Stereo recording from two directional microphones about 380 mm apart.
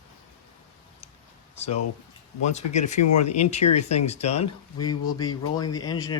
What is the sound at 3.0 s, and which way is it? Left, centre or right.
Speech, left.